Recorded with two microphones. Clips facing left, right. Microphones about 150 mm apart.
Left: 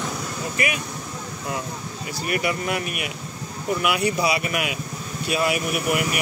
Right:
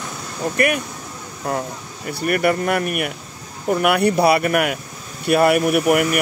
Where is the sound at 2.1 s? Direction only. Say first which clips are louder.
Right 7 dB; 55° right (ahead or behind).